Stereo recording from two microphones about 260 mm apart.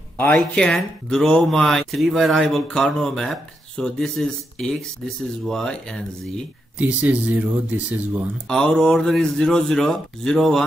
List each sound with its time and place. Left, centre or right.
0.2 s speech: centre